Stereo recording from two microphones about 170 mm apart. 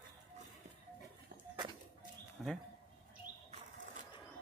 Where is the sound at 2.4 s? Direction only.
Centre (ahead or behind).